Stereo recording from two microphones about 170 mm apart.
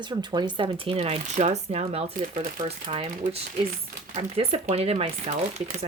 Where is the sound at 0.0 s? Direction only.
25° right (ahead or behind).